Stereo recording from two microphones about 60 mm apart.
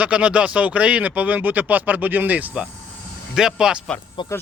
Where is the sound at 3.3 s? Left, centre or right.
Centre.